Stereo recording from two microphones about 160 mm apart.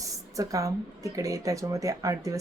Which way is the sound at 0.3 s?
20° right (ahead or behind).